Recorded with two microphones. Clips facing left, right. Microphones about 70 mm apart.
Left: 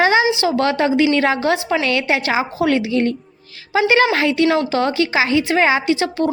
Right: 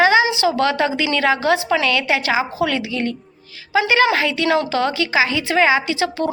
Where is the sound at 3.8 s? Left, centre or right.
Left.